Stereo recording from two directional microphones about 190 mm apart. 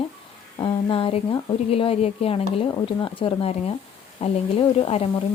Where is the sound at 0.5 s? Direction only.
30° left (ahead or behind).